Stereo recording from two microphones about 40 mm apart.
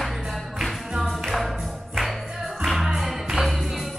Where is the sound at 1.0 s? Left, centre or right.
Centre.